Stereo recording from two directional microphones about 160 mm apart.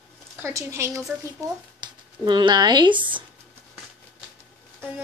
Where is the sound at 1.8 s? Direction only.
25° right (ahead or behind).